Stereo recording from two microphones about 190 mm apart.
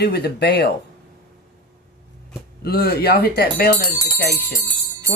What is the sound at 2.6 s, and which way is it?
Speech, 55° left (ahead or behind).